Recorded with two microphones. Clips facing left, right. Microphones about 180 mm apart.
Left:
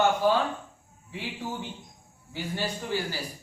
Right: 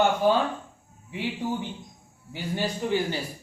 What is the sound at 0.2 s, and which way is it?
Speech, 20° right (ahead or behind).